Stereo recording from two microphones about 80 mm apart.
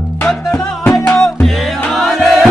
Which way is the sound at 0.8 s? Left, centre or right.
Left.